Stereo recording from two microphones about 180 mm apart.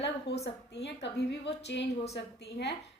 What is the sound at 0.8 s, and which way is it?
A woman's voice, 70° left (ahead or behind).